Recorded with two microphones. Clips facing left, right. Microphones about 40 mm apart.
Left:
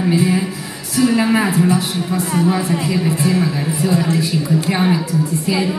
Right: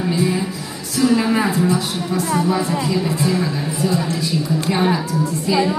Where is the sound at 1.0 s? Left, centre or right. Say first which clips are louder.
Left 1 dB; left.